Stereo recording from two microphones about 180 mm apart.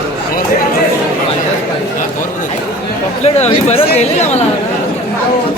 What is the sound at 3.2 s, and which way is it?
Speech, 35° left (ahead or behind).